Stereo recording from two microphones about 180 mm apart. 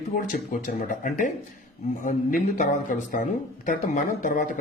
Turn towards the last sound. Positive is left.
turn(degrees=45)  # may be behind; listen again after turning